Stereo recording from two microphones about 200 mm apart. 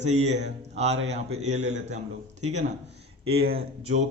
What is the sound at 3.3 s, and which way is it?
Speech, 50° right (ahead or behind).